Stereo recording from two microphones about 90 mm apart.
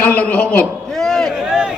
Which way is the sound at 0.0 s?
15° left (ahead or behind).